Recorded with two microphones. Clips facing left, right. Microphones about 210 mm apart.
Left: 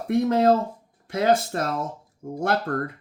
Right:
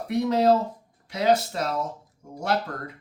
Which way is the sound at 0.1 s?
50° left (ahead or behind).